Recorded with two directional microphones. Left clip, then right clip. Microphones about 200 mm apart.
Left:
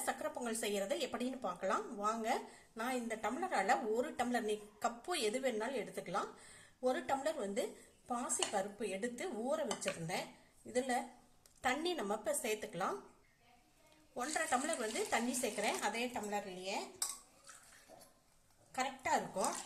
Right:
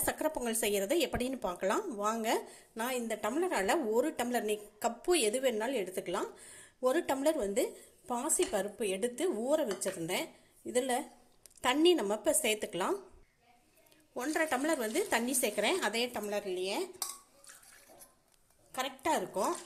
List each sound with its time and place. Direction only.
0.0 s speech: 35° right (ahead or behind)
14.2 s speech: 35° right (ahead or behind)
18.7 s speech: 40° right (ahead or behind)